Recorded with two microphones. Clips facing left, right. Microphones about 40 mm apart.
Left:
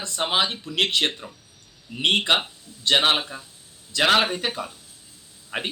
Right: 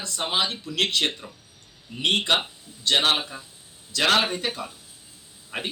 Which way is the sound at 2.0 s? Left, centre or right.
Left.